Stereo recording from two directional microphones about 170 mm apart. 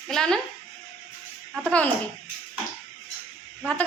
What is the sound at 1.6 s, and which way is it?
Speech, 5° left (ahead or behind).